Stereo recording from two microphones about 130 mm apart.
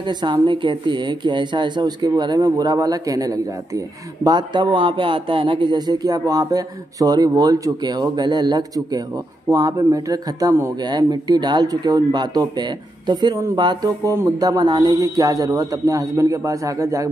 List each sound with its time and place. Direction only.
0.0 s speech: 35° right (ahead or behind)